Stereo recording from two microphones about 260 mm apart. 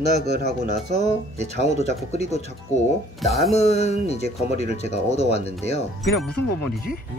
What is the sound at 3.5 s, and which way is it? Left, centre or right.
Speech, left.